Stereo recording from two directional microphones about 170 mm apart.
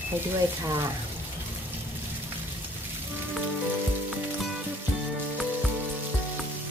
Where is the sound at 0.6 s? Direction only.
20° right (ahead or behind).